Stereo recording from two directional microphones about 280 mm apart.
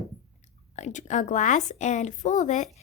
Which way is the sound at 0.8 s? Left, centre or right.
Left.